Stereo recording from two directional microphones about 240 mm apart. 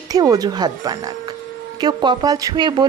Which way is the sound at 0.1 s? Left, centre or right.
Centre.